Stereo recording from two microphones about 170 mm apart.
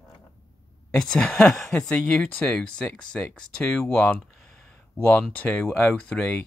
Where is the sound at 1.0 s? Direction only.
5° left (ahead or behind).